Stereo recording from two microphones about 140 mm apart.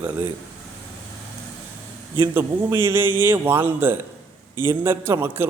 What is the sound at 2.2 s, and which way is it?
A man's voice, 15° right (ahead or behind).